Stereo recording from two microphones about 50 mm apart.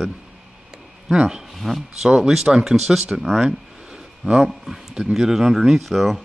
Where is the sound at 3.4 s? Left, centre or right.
Centre.